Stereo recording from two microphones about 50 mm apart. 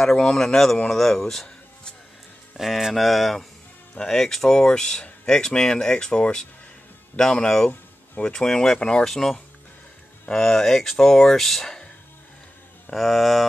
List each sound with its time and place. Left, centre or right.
0.0 s speech: centre
2.5 s speech: centre
9.1 s speech: centre
12.9 s speech: centre